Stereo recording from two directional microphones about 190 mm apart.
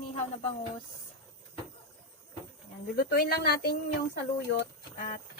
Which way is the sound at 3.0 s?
55° left (ahead or behind).